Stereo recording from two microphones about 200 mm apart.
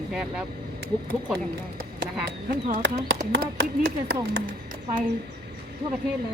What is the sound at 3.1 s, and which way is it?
Speech, 60° right (ahead or behind).